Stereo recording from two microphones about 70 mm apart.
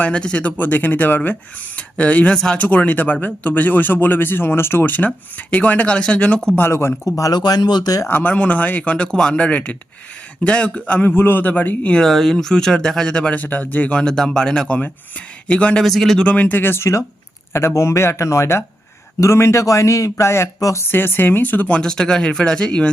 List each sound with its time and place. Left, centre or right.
0.0 s speech: centre
2.6 s speech: left
6.6 s speech: left
7.3 s speech: left
8.0 s speech: left
11.1 s speech: left
12.0 s speech: centre
13.4 s speech: left
15.8 s speech: centre
16.2 s a man's voice: centre; by 20.5 s left
20.6 s a man's voice: left
20.8 s speech: left
21.8 s speech: centre